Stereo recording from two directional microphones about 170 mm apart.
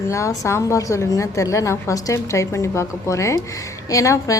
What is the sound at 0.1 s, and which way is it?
A woman's voice, 15° left (ahead or behind).